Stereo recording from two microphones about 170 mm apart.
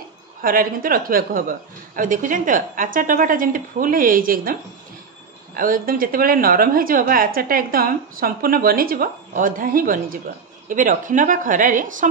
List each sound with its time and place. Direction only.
0.4 s a woman's voice: 55° right (ahead or behind)
5.6 s a woman's voice: 55° right (ahead or behind)